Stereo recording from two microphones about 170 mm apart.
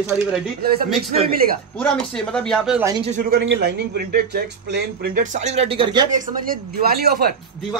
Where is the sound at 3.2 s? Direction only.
65° right (ahead or behind); by 6.0 s 30° right (ahead or behind).